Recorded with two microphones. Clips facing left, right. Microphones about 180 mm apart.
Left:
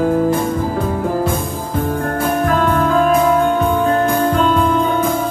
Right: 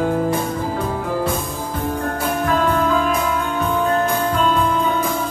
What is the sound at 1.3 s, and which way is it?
Music, 50° left (ahead or behind).